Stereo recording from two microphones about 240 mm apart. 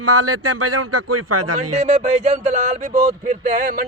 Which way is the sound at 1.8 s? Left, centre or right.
Right.